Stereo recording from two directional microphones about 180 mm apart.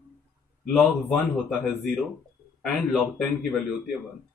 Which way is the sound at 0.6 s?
5° left (ahead or behind).